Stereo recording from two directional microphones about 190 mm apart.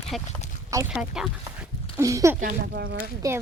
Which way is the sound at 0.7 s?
15° right (ahead or behind).